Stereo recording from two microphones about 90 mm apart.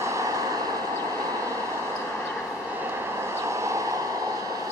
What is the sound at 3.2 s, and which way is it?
Vehicle, 30° right (ahead or behind).